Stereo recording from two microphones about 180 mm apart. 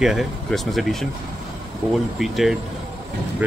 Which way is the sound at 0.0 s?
Centre (ahead or behind).